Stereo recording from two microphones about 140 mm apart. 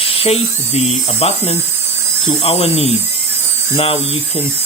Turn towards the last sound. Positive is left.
turn(degrees=40)  # may be behind; listen again after turning